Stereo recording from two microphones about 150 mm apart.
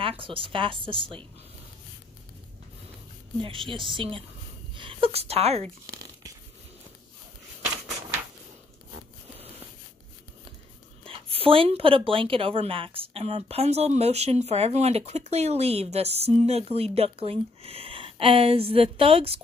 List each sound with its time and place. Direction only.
0.2 s a woman's voice: 35° right (ahead or behind)
3.3 s a woman's voice: 35° right (ahead or behind)
5.9 s tearing: 25° right (ahead or behind)
11.1 s a woman's voice: 40° right (ahead or behind)